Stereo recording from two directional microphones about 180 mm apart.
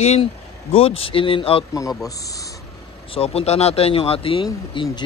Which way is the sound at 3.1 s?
35° left (ahead or behind).